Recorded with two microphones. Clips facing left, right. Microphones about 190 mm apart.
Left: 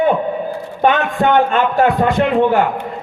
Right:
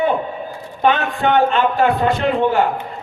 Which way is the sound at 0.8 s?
45° left (ahead or behind).